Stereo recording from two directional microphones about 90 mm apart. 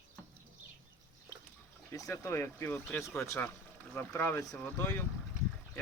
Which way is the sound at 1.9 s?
40° left (ahead or behind).